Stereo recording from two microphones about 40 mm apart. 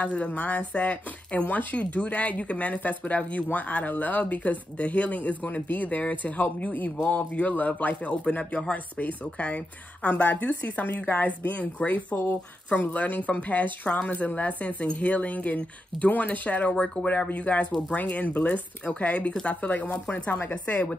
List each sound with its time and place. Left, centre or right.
0.0 s speech: left
16.7 s speech: left
17.1 s speech: left
20.3 s speech: left